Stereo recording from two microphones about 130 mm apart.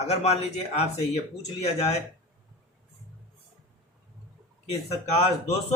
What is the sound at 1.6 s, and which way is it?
Speech, 55° left (ahead or behind).